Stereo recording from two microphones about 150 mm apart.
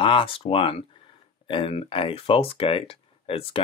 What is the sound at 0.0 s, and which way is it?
Speech, 35° left (ahead or behind).